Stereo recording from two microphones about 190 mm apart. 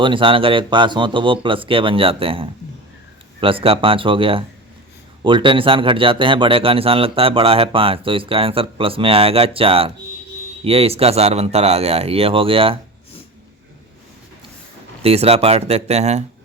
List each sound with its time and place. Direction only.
0.0 s a man's voice: 25° right (ahead or behind)
15.0 s a man's voice: 30° right (ahead or behind)